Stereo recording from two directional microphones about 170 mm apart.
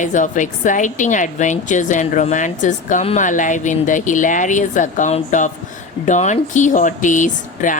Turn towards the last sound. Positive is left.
turn(degrees=50)  # may be behind; listen again after turning